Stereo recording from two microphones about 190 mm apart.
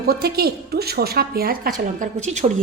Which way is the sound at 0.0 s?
55° right (ahead or behind).